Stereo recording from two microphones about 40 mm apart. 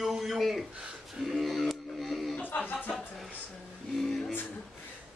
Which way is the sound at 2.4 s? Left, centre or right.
Left.